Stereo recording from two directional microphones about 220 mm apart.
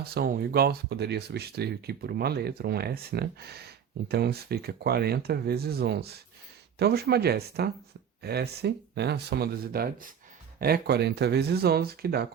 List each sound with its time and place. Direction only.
0.0 s speech: 45° right (ahead or behind)